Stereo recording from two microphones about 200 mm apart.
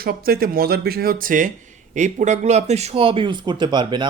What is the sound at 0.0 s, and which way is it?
Speech, 50° right (ahead or behind).